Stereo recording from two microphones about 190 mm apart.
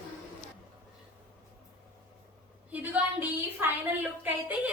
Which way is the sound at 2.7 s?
10° right (ahead or behind).